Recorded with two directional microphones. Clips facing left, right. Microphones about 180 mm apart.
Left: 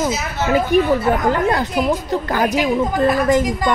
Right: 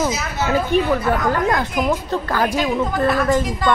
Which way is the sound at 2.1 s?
20° left (ahead or behind).